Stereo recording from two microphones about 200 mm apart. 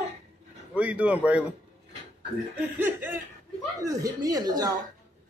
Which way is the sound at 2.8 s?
10° right (ahead or behind).